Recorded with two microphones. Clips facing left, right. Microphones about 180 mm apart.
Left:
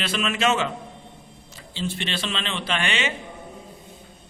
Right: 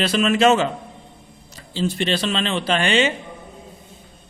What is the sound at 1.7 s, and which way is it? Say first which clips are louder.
A man's voice: right 7 dB; 40° right (ahead or behind).